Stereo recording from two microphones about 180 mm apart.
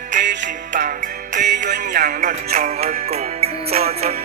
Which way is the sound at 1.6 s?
45° right (ahead or behind).